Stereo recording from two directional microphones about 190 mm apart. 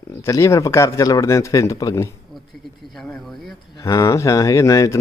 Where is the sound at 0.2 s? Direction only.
15° left (ahead or behind).